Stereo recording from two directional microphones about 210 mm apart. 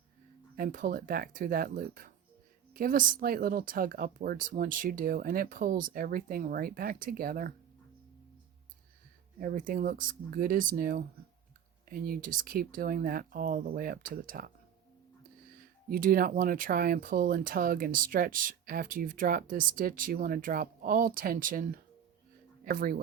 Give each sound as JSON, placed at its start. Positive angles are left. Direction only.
{"t": 0.5, "sound": "speech", "side_deg": -40}
{"t": 9.4, "sound": "speech", "side_deg": -40}
{"t": 15.6, "sound": "speech", "side_deg": -40}